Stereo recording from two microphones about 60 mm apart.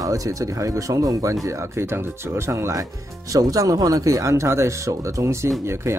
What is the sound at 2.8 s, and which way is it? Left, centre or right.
Speech, right.